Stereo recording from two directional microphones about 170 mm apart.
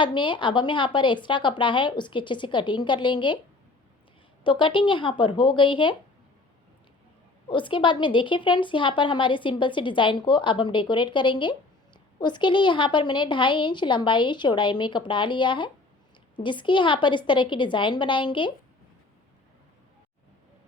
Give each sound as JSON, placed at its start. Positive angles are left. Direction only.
{"t": 0.0, "sound": "a woman's voice", "side_deg": 30}
{"t": 4.4, "sound": "a woman's voice", "side_deg": 30}
{"t": 7.4, "sound": "a woman's voice", "side_deg": 30}